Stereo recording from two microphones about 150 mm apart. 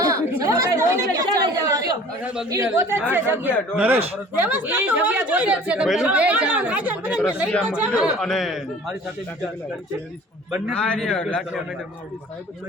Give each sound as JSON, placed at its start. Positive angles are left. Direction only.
{"t": 0.0, "sound": "chatter", "side_deg": -25}
{"t": 2.2, "sound": "a man's voice", "side_deg": -5}
{"t": 2.7, "sound": "speech", "side_deg": -15}
{"t": 7.9, "sound": "a man's voice", "side_deg": 5}
{"t": 10.8, "sound": "a man's voice", "side_deg": 5}